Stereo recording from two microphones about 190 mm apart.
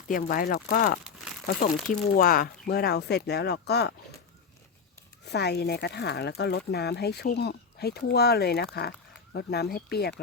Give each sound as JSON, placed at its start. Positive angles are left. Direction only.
{"t": 0.1, "sound": "speech", "side_deg": 50}
{"t": 5.3, "sound": "speech", "side_deg": 60}